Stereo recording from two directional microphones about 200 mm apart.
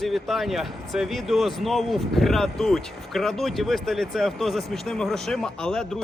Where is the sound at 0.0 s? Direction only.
Centre (ahead or behind).